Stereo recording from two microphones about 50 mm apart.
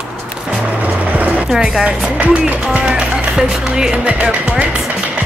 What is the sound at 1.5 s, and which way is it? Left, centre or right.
Speech, centre.